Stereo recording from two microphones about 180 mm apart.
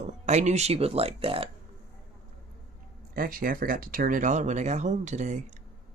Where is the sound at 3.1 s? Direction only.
50° right (ahead or behind).